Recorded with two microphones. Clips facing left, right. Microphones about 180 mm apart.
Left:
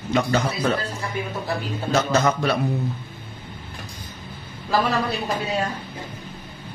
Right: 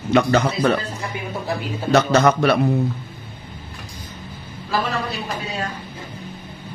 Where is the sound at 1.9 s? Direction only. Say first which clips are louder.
Right 5 dB; 70° right (ahead or behind).